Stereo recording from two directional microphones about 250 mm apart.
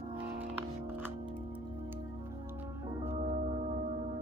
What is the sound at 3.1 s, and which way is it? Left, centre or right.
Gong, right.